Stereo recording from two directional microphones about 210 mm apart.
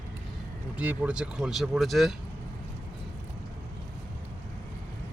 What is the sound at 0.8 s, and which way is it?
Speech, 5° right (ahead or behind).